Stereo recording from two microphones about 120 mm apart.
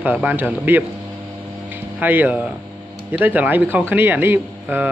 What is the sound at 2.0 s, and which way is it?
Speech, 15° right (ahead or behind).